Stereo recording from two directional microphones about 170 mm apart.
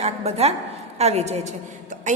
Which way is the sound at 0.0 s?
40° right (ahead or behind).